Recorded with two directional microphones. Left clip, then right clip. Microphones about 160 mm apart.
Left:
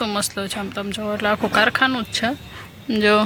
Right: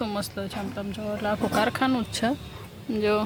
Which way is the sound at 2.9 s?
10° left (ahead or behind).